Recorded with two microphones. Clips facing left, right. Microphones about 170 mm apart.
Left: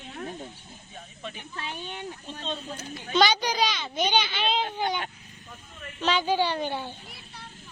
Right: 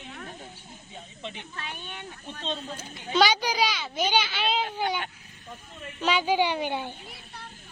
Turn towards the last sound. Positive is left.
turn(degrees=-15)  # may be behind; listen again after turning